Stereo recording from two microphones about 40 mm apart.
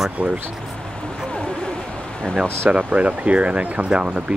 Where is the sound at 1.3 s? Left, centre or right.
Left.